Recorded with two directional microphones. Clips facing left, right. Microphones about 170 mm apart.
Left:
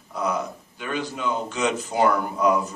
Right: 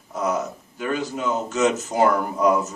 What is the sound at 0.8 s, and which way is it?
Speech, 40° right (ahead or behind).